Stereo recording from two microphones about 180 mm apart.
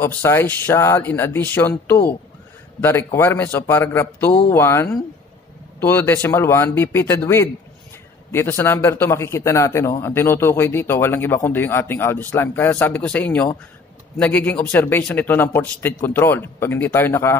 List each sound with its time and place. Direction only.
0.0 s a man's voice: 15° left (ahead or behind)